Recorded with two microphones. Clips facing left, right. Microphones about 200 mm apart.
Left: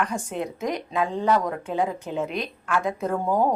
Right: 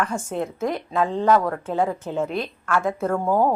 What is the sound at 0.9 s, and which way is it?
Speech, 50° right (ahead or behind).